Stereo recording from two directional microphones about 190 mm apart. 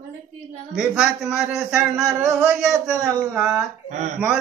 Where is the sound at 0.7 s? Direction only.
Centre (ahead or behind).